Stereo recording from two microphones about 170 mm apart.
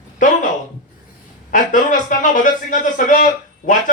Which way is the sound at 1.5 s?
50° left (ahead or behind).